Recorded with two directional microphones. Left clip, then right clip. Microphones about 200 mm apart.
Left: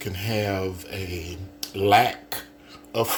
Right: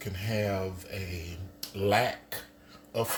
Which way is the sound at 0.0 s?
50° left (ahead or behind).